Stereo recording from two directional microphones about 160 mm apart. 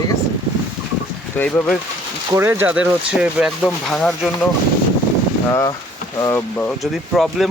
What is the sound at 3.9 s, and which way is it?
Speech, 5° left (ahead or behind).